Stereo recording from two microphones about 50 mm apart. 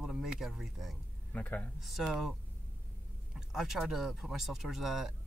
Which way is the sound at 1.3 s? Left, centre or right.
Left.